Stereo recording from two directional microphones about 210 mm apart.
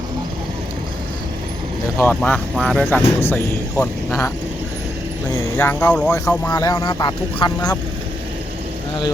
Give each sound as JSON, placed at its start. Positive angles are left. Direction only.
{"t": 2.0, "sound": "speech", "side_deg": 5}
{"t": 5.5, "sound": "speech", "side_deg": 10}